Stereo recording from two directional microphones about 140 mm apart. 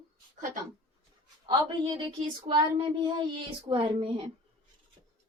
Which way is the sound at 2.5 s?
55° right (ahead or behind).